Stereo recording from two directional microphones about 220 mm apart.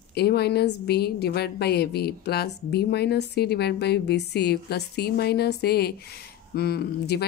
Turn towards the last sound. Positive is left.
turn(degrees=45)  # may be behind; listen again after turning